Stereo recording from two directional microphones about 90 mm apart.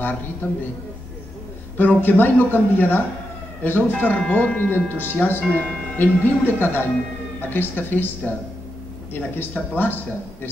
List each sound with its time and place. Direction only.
0.0 s speech: 20° left (ahead or behind)
1.8 s speech: 20° left (ahead or behind)